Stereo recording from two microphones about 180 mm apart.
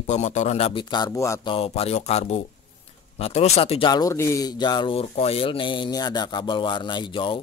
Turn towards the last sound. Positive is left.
turn(degrees=25)  # may be behind; listen again after turning